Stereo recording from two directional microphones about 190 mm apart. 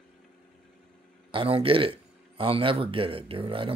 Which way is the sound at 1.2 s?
30° right (ahead or behind).